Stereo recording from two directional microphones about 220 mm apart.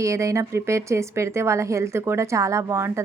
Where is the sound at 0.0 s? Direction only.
15° right (ahead or behind).